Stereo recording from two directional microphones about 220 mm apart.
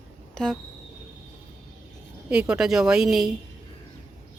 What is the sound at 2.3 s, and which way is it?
Speech, 5° right (ahead or behind).